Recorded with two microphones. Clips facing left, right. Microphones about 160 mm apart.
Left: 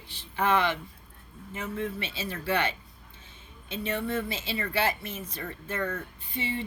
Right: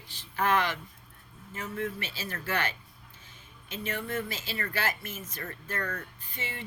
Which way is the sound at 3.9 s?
25° left (ahead or behind).